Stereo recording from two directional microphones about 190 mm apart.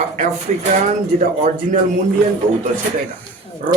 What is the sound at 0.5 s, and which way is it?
Speech, 40° right (ahead or behind).